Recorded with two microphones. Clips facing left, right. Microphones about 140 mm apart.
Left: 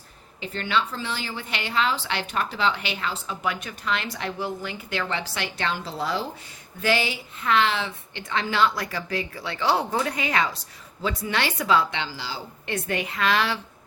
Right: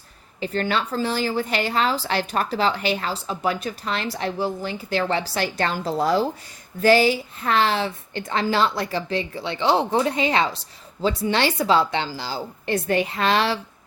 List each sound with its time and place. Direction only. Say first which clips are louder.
0.3 s a woman's voice: right 3 dB; 40° right (ahead or behind)